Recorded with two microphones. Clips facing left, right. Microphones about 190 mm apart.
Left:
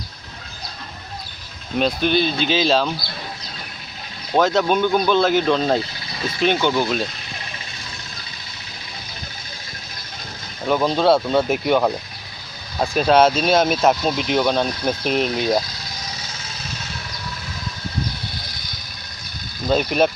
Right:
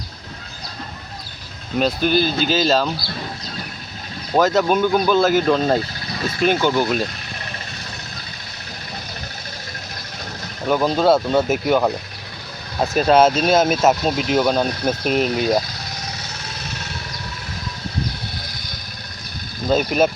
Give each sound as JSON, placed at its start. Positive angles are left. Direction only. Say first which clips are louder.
{"t": 1.8, "sound": "speech", "louder": "right 1 dB", "side_deg": -5}
{"t": 4.4, "sound": "speech", "louder": "right 1 dB", "side_deg": -5}
{"t": 10.7, "sound": "speech", "louder": "right 1 dB", "side_deg": -5}
{"t": 16.2, "sound": "engine", "louder": "right 2 dB", "side_deg": -65}
{"t": 19.6, "sound": "speech", "louder": "right 1 dB", "side_deg": -5}